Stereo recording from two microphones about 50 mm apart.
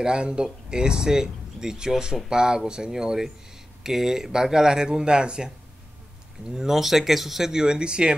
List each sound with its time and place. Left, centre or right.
0.0 s speech: centre
6.5 s speech: centre